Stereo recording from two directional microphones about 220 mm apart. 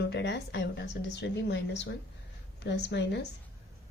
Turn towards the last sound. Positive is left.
turn(degrees=50)  # may be behind; listen again after turning